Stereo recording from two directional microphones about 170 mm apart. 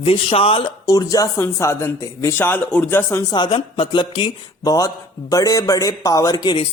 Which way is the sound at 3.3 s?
30° left (ahead or behind).